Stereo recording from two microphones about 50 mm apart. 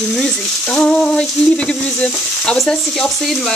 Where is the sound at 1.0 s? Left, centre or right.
Centre.